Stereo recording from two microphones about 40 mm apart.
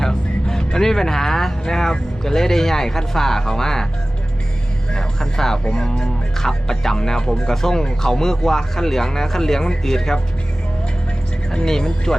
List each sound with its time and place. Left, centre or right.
0.0 s speech: centre
4.9 s vehicle: centre
5.6 s speech: left
11.5 s speech: centre